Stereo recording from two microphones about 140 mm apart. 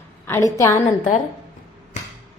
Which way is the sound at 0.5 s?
25° left (ahead or behind).